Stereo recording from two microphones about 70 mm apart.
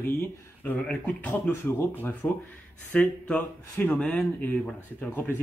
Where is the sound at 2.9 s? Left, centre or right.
Centre.